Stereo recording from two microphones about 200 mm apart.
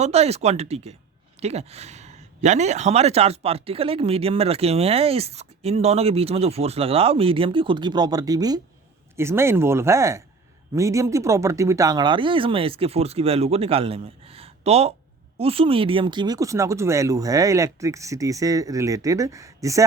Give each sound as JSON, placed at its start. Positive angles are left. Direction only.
{"t": 0.0, "sound": "speech", "side_deg": -30}